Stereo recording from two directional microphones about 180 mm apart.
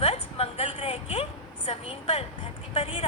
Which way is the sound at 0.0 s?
35° left (ahead or behind).